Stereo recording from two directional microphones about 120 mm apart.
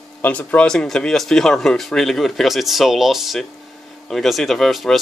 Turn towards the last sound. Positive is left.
turn(degrees=0)  # may be behind; listen again after turning